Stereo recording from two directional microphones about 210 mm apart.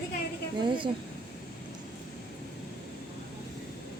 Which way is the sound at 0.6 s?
25° right (ahead or behind).